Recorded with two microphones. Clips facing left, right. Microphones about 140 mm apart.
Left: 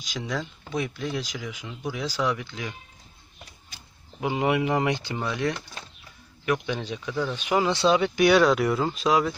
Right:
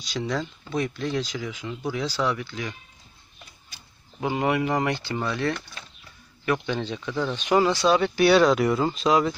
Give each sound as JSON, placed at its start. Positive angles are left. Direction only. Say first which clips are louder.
{"t": 0.0, "sound": "speech", "louder": "right 3 dB", "side_deg": 10}
{"t": 4.2, "sound": "speech", "louder": "even", "side_deg": 15}
{"t": 7.7, "sound": "speech", "louder": "even", "side_deg": 25}
{"t": 8.0, "sound": "speech", "louder": "right 2 dB", "side_deg": 15}